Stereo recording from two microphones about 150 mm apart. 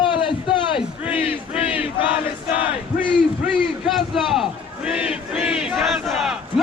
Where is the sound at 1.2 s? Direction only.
35° left (ahead or behind).